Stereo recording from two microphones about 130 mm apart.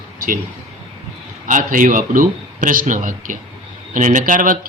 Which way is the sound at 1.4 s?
90° right.